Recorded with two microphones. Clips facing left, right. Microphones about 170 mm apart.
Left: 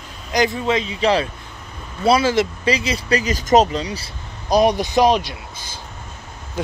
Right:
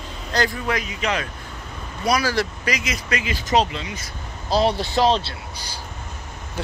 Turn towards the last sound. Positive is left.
turn(degrees=15)  # may be behind; listen again after turning